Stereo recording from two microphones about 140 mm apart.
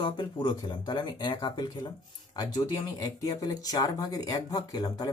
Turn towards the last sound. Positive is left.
turn(degrees=30)  # may be behind; listen again after turning